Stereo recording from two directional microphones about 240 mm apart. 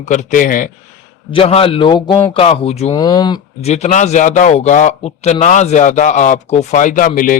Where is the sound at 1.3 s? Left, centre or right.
Left.